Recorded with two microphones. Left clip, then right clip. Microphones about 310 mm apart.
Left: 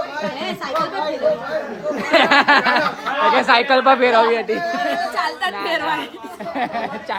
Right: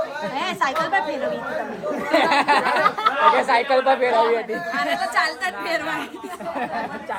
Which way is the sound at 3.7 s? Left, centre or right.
Left.